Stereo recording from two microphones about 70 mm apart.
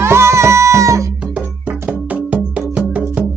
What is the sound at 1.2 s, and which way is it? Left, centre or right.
Music, centre.